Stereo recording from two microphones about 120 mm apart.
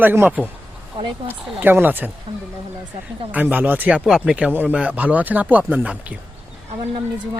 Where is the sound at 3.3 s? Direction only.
15° right (ahead or behind).